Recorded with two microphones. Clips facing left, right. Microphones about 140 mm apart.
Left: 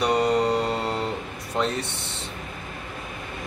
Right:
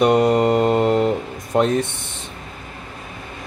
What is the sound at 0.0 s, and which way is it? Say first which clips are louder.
Mantra: right 6 dB; 55° right (ahead or behind).